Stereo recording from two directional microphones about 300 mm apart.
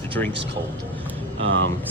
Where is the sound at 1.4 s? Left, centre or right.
Right.